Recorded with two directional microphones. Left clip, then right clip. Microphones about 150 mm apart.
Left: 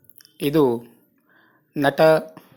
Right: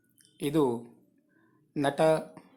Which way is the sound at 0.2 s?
25° left (ahead or behind).